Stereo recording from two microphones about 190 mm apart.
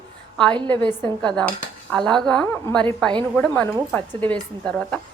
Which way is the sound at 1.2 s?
5° left (ahead or behind).